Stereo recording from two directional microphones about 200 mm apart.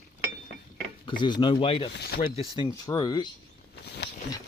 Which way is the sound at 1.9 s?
50° left (ahead or behind).